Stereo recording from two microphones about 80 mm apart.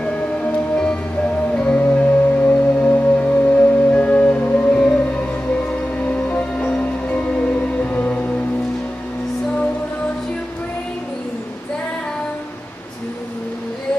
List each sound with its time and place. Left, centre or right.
0.0 s music: centre